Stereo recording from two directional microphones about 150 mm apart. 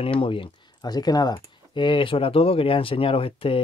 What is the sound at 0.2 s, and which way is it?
Speech, 35° left (ahead or behind).